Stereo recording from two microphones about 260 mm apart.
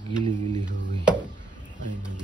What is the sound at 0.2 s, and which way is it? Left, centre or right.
Mantra, centre.